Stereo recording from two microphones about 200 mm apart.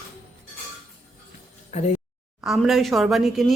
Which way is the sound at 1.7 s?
35° left (ahead or behind).